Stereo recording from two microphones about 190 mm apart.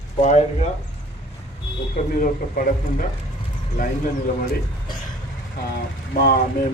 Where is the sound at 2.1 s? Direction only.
45° left (ahead or behind).